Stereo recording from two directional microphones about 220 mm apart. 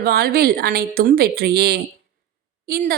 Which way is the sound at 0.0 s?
45° right (ahead or behind).